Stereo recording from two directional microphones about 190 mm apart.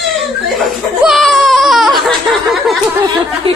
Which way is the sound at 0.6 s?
Centre (ahead or behind).